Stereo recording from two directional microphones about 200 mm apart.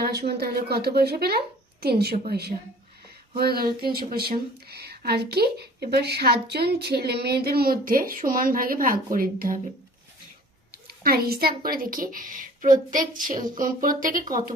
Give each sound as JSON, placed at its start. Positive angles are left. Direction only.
{"t": 0.0, "sound": "speech", "side_deg": -55}
{"t": 10.8, "sound": "speech", "side_deg": -50}